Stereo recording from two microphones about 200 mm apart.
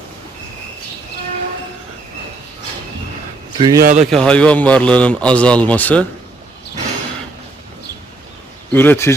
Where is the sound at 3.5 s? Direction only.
25° right (ahead or behind).